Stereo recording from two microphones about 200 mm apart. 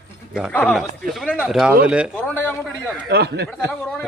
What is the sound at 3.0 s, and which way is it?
Speech, 55° right (ahead or behind).